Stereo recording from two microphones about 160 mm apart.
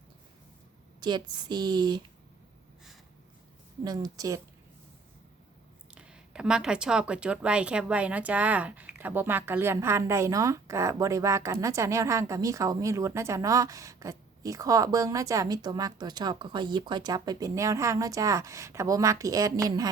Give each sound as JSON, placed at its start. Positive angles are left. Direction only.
{"t": 1.0, "sound": "speech", "side_deg": -25}
{"t": 3.8, "sound": "speech", "side_deg": -25}
{"t": 5.9, "sound": "speech", "side_deg": -5}